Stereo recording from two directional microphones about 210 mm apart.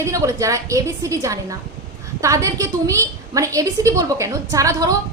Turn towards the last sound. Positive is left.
turn(degrees=-15)  # may be behind; listen again after turning